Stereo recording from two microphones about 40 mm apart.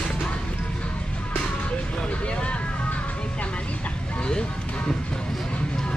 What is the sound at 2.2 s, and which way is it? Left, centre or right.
Music, left.